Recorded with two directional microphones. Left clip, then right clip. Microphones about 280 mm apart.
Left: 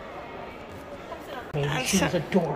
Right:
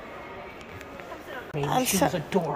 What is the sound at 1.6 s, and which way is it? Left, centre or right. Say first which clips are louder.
Speech: right 2 dB; right.